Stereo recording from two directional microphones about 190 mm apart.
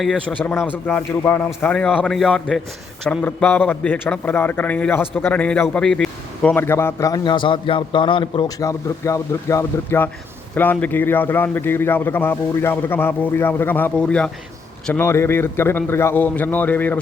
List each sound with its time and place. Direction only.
0.0 s a man's voice: centre (ahead or behind)